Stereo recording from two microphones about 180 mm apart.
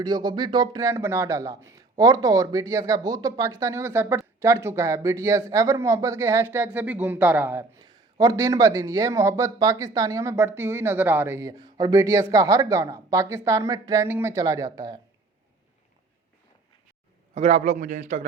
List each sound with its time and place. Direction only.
0.0 s speech: 20° right (ahead or behind)
7.8 s speech: 20° right (ahead or behind)
17.3 s a man's voice: 35° right (ahead or behind)